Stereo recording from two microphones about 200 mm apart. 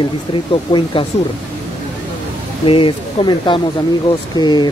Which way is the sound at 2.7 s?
25° left (ahead or behind).